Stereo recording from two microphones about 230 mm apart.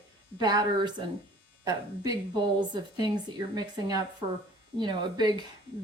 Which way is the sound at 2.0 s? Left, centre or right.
Centre.